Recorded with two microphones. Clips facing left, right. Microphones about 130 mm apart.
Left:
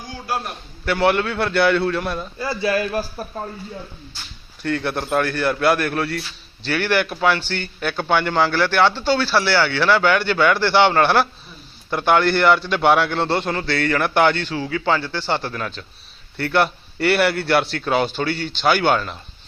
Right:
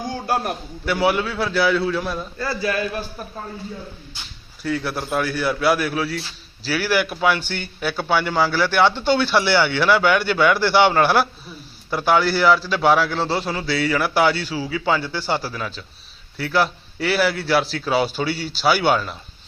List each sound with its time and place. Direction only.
0.3 s a man's voice: 45° right (ahead or behind)
0.9 s a man's voice: 5° right (ahead or behind)
2.4 s a man's voice: 20° left (ahead or behind)
2.6 s a man's voice: 35° left (ahead or behind)
4.6 s a man's voice: 5° right (ahead or behind)